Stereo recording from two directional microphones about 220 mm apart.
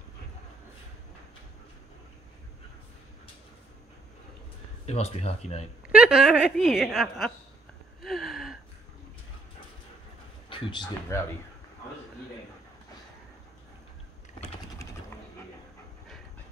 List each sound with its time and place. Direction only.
4.8 s speech: 30° left (ahead or behind)
5.9 s a woman's voice: 5° right (ahead or behind)
8.0 s a sound: centre (ahead or behind)
10.5 s speech: 20° left (ahead or behind)